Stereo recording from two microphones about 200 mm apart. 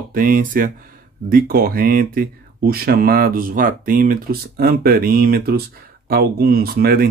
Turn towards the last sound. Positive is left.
turn(degrees=-50)  # may be behind; listen again after turning